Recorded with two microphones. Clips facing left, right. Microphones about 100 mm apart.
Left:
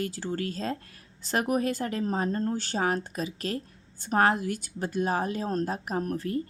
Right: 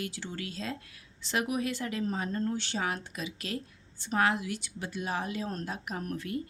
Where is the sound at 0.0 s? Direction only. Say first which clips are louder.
Left 7 dB; 40° left (ahead or behind).